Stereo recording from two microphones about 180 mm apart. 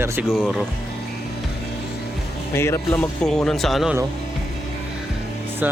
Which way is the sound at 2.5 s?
15° left (ahead or behind).